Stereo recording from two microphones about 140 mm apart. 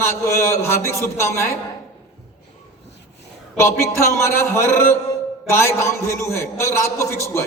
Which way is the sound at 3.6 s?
20° left (ahead or behind).